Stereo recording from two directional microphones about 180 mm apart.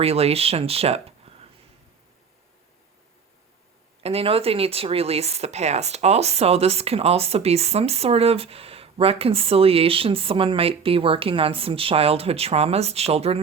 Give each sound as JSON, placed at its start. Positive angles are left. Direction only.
{"t": 0.0, "sound": "speech", "side_deg": -35}
{"t": 4.0, "sound": "speech", "side_deg": -35}